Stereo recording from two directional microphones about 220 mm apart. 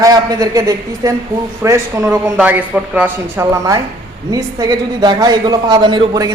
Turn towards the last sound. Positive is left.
turn(degrees=-20)  # may be behind; listen again after turning